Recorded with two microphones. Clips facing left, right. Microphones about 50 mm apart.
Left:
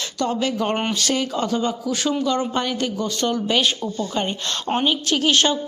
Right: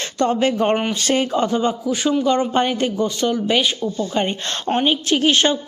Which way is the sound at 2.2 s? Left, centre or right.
Right.